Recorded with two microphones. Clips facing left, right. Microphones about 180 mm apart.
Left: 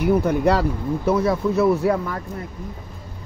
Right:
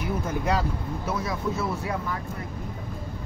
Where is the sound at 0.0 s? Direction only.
70° left (ahead or behind).